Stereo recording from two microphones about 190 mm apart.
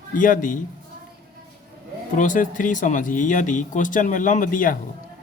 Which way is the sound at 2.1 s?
45° left (ahead or behind).